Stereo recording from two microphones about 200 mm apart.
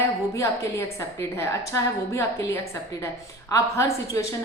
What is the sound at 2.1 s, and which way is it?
A woman's voice, 15° left (ahead or behind).